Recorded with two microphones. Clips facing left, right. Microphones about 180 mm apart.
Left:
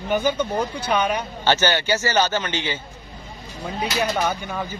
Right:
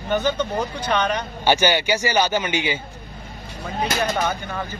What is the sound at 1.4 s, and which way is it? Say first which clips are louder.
Speech: right 2 dB; 10° right (ahead or behind).